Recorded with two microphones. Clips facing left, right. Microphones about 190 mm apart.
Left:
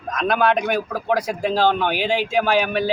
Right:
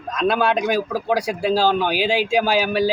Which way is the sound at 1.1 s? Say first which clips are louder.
Even; 10° right (ahead or behind).